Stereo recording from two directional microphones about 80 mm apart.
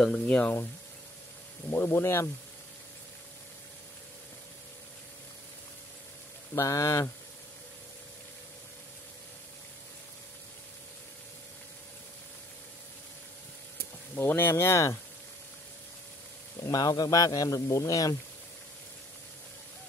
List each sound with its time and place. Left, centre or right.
0.0 s speech: centre
1.7 s speech: left
6.5 s speech: left
14.1 s speech: left
14.5 s speech: left
16.5 s speech: left